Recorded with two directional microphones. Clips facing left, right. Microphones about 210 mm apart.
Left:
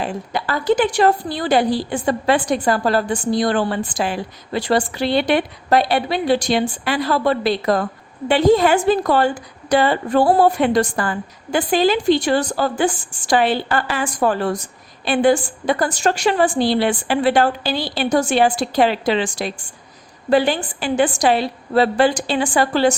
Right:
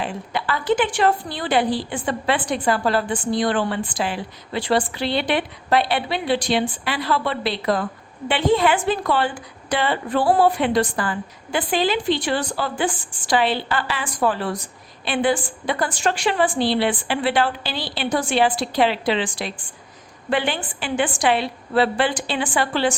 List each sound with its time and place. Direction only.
0.0 s a woman's voice: 40° left (ahead or behind)